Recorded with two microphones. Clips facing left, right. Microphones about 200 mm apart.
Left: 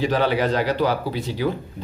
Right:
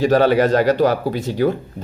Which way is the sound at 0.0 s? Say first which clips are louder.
Right 6 dB; 45° right (ahead or behind).